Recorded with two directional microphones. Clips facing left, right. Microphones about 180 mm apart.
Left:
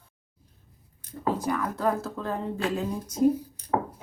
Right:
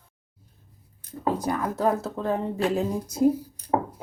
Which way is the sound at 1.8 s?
20° right (ahead or behind).